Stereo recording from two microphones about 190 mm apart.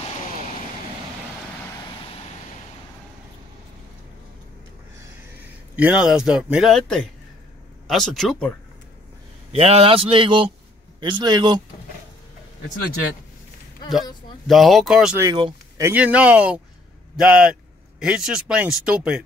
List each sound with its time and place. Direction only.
5.8 s speech: 5° right (ahead or behind)
9.5 s speech: 30° right (ahead or behind)
14.5 s speech: centre (ahead or behind)
15.1 s speech: 25° right (ahead or behind)
15.8 s speech: 10° right (ahead or behind)